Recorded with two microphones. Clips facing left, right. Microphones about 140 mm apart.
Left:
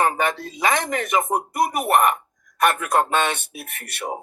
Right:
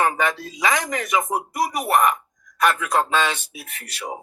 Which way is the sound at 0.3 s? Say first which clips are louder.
Left 1 dB; 55° left (ahead or behind).